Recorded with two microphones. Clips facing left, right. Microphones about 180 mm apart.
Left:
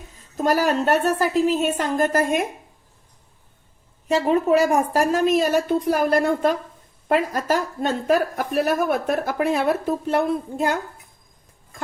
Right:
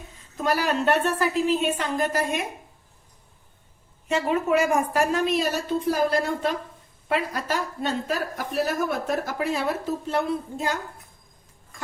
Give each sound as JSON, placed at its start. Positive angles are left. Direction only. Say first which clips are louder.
{"t": 0.3, "sound": "a woman's voice", "louder": "left 4 dB", "side_deg": 45}
{"t": 4.1, "sound": "a woman's voice", "louder": "left 4 dB", "side_deg": 35}